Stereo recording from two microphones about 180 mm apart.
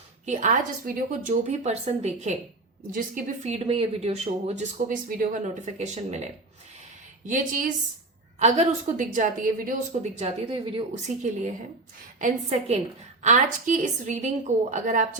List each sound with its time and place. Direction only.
0.3 s a woman's voice: 45° right (ahead or behind)